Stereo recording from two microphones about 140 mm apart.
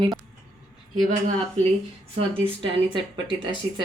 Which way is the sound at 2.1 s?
45° right (ahead or behind).